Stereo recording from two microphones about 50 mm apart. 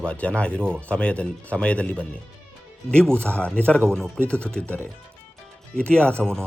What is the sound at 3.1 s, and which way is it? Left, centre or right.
Speech, left.